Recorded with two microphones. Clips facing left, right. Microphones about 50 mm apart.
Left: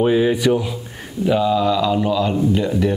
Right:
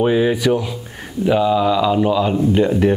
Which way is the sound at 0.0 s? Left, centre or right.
Centre.